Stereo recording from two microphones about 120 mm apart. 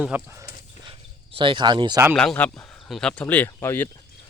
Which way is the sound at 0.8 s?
45° right (ahead or behind).